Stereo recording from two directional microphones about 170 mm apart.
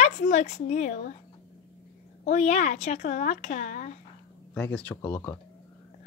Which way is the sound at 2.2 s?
45° left (ahead or behind).